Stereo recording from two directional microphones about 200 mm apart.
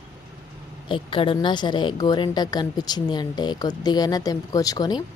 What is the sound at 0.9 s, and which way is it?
A woman's voice, 25° left (ahead or behind).